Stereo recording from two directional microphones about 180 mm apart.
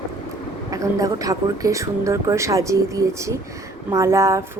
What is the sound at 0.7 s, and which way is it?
Speech, 20° right (ahead or behind).